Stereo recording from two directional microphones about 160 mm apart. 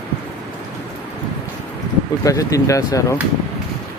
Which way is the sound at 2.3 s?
20° left (ahead or behind).